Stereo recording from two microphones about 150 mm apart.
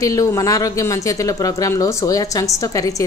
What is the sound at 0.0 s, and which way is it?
Speech, 20° left (ahead or behind).